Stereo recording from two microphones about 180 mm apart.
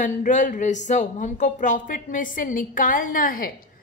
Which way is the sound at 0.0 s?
45° left (ahead or behind).